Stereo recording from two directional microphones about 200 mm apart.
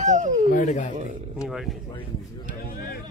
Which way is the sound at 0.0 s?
40° right (ahead or behind).